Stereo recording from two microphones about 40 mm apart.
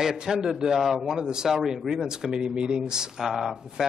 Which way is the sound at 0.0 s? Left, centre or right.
Centre.